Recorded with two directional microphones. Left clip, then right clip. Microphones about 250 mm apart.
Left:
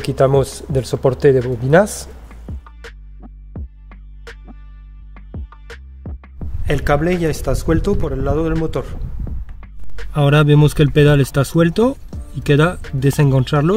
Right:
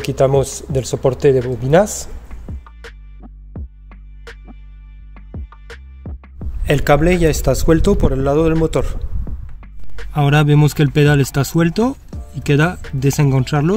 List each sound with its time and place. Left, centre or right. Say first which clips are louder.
0.0 s a sound: even; centre
5.1 s music: even; centre
6.6 s a man's voice: right 3 dB; centre
9.6 s speech: even; centre